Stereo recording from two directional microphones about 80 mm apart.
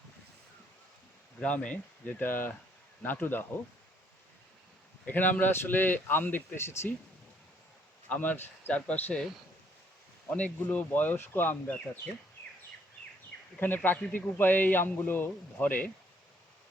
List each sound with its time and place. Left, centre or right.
1.4 s speech: centre
5.0 s speech: left
8.1 s speech: left
10.2 s speech: centre
13.6 s speech: left